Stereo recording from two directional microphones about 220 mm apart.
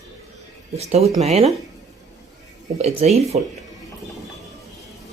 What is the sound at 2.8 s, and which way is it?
Speech, 30° right (ahead or behind).